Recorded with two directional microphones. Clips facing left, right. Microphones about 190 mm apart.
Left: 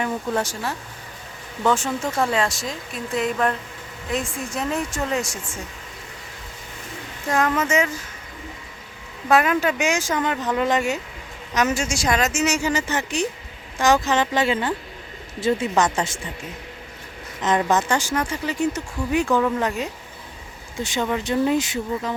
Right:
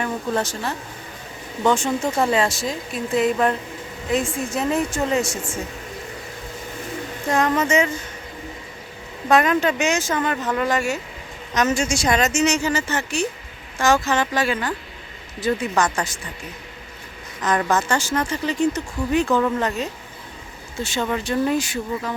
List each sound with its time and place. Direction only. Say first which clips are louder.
0.0 s speech: even; 10° left (ahead or behind)
1.9 s speech: right 3 dB; 15° right (ahead or behind)
2.2 s speech: right 2 dB; centre (ahead or behind)
7.3 s speech: right 2 dB; centre (ahead or behind)
9.3 s speech: right 1 dB; 5° left (ahead or behind)
11.5 s speech: right 2 dB; 5° left (ahead or behind); by 16.3 s 25° left (ahead or behind)
17.6 s speech: even; 15° left (ahead or behind)